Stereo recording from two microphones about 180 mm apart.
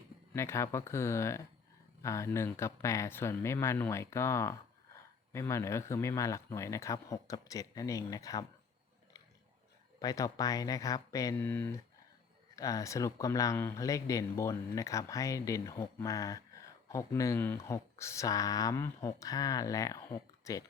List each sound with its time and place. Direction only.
0.3 s speech: 15° left (ahead or behind)
10.0 s speech: 20° left (ahead or behind)